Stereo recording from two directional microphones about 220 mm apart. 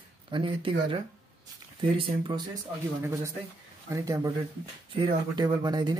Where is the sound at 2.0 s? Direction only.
20° right (ahead or behind).